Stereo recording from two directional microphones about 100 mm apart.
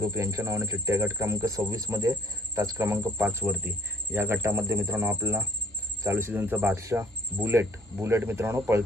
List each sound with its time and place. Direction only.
0.0 s speech: 30° right (ahead or behind)